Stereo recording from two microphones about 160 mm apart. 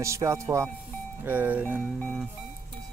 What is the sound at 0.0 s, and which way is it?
Speech, 20° right (ahead or behind).